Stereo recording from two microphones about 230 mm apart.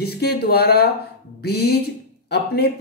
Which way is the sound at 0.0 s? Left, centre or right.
Left.